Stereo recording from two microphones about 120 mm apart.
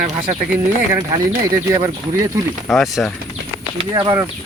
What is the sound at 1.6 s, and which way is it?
Speech, 35° right (ahead or behind).